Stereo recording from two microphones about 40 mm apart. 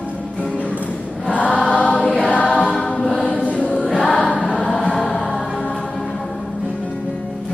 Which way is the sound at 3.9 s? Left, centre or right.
Centre.